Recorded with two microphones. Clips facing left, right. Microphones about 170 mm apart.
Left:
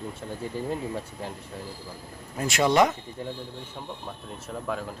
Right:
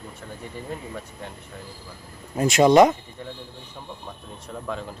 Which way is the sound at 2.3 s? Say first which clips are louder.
Right 7 dB; 20° right (ahead or behind).